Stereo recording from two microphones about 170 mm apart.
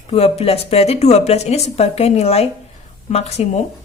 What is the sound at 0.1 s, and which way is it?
A woman's voice, 35° left (ahead or behind).